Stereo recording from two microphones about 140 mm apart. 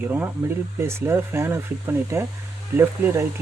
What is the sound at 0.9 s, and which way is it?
Speech, 20° right (ahead or behind).